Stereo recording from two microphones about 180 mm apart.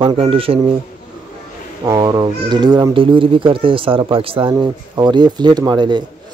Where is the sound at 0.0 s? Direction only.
30° right (ahead or behind).